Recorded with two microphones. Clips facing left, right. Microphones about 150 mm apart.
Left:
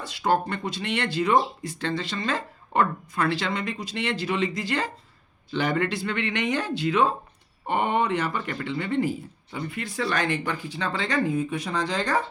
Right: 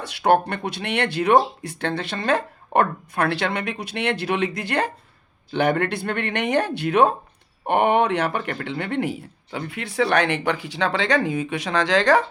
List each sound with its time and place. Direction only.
0.0 s speech: 65° right (ahead or behind); by 12.2 s 90° right